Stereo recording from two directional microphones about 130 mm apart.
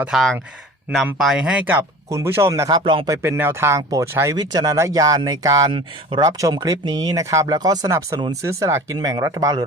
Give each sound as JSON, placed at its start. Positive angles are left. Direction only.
{"t": 0.0, "sound": "speech", "side_deg": 0}
{"t": 2.6, "sound": "speech", "side_deg": -35}
{"t": 3.1, "sound": "speech", "side_deg": -20}